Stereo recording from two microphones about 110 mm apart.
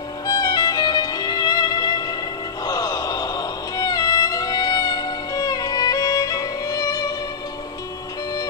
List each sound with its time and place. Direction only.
0.3 s music: 35° left (ahead or behind)